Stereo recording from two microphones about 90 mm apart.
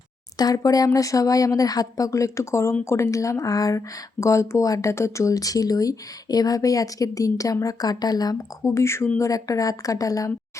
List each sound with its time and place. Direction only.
0.3 s speech: 45° left (ahead or behind)